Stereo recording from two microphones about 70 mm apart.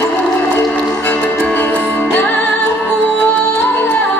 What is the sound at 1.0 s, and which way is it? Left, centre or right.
Music, left.